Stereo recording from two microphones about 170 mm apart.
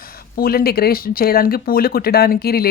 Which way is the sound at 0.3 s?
65° left (ahead or behind).